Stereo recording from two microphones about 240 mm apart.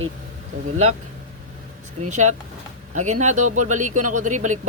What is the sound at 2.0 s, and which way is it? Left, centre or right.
Speech, right.